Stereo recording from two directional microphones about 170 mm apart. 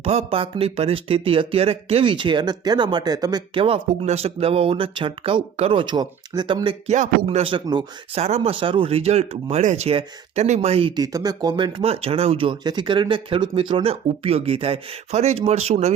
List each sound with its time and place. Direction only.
0.0 s speech: 35° right (ahead or behind)
8.2 s speech: 40° right (ahead or behind)
8.5 s speech: 30° right (ahead or behind)